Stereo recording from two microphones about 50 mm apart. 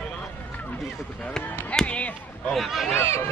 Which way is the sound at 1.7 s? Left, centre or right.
Left.